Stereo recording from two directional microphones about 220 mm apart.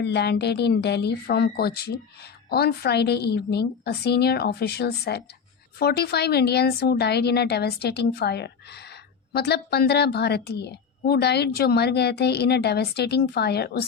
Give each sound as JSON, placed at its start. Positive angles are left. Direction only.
{"t": 0.0, "sound": "a woman's voice", "side_deg": 50}